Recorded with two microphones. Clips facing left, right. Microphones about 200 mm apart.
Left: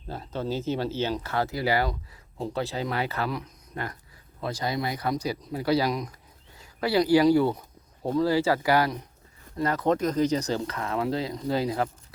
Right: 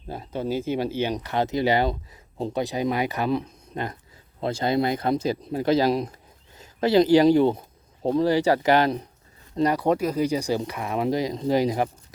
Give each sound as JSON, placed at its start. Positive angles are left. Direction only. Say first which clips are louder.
{"t": 0.1, "sound": "speech", "louder": "right 3 dB", "side_deg": -15}